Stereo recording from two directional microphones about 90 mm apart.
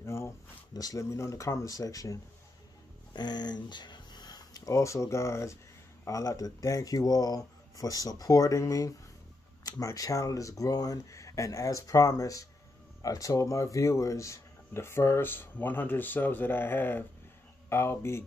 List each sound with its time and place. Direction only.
0.0 s a sound: 30° left (ahead or behind)
0.7 s speech: 40° left (ahead or behind)
3.1 s speech: 50° left (ahead or behind); by 18.2 s 30° left (ahead or behind)